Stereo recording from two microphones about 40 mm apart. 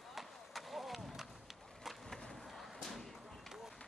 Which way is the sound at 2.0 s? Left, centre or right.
Centre.